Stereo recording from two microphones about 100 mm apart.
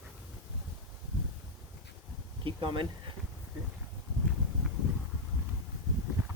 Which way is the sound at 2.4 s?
55° right (ahead or behind).